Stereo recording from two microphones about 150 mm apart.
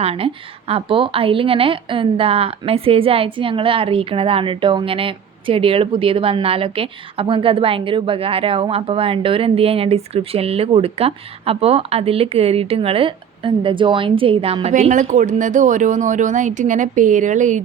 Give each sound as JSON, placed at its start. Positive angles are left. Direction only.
{"t": 0.0, "sound": "a woman's voice", "side_deg": -40}
{"t": 14.7, "sound": "speech", "side_deg": -55}